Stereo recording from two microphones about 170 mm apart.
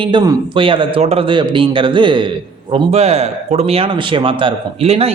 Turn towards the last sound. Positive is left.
turn(degrees=-35)  # may be behind; listen again after turning